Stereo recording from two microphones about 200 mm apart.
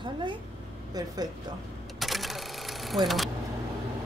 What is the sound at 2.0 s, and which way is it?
Sewing machine, centre (ahead or behind).